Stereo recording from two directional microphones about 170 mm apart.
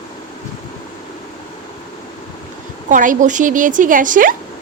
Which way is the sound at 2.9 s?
50° right (ahead or behind).